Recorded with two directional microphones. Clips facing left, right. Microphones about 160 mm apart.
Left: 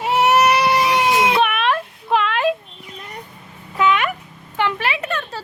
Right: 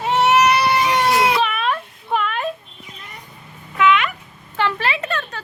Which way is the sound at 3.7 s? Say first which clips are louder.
Right 1 dB; 35° left (ahead or behind).